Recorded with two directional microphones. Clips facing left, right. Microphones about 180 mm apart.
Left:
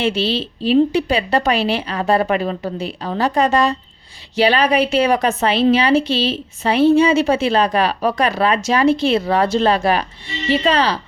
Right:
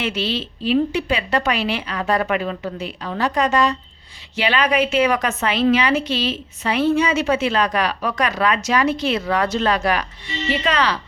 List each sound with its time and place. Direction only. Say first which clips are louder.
0.0 s a woman's voice: left 5 dB; 30° left (ahead or behind)